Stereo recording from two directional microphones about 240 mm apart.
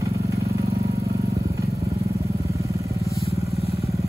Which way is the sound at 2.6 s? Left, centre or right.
Centre.